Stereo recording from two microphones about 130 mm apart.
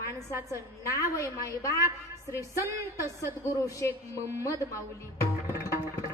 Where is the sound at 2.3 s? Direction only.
25° left (ahead or behind).